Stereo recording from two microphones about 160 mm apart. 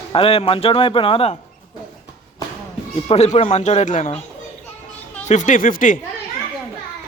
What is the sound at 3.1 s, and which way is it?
Speech, 40° left (ahead or behind).